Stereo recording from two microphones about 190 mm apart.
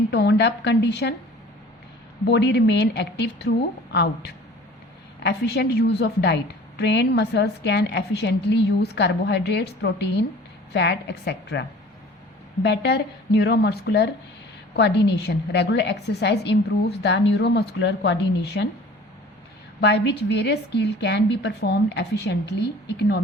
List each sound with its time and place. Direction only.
0.1 s a woman's voice: 65° left (ahead or behind)
2.2 s a woman's voice: 65° left (ahead or behind)
12.6 s a woman's voice: 65° left (ahead or behind)
19.8 s a woman's voice: 65° left (ahead or behind)